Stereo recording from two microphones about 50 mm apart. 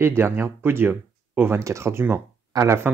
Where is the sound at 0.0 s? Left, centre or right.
Right.